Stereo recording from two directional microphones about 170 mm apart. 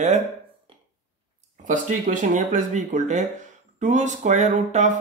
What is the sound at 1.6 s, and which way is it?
Speech, 50° right (ahead or behind).